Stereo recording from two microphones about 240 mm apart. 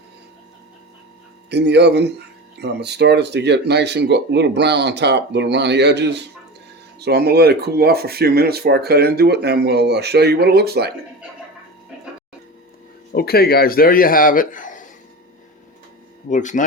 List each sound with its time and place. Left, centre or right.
1.5 s speech: right
13.1 s a man's voice: left
16.3 s a man's voice: left